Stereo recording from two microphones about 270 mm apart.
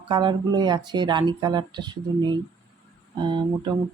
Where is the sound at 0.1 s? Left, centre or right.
Centre.